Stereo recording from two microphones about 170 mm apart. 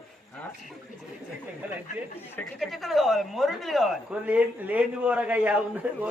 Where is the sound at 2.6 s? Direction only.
Centre (ahead or behind).